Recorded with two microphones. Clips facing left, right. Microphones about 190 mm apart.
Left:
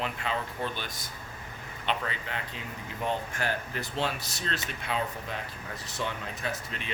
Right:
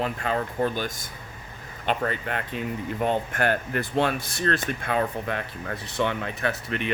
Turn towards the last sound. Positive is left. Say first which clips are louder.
# right 8 dB
turn(degrees=-65)  # may be behind; listen again after turning